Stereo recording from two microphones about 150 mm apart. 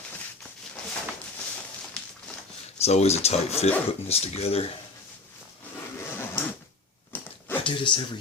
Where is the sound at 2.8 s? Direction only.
45° left (ahead or behind).